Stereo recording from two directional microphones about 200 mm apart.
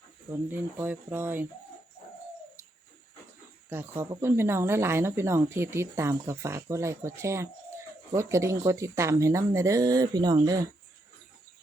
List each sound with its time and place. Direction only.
0.3 s speech: 10° right (ahead or behind)
3.7 s speech: 10° right (ahead or behind)